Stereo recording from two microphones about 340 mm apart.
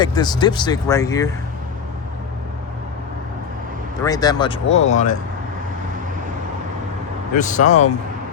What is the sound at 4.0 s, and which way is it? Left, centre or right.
Speech, centre.